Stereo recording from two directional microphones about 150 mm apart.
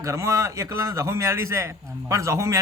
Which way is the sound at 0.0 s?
20° right (ahead or behind).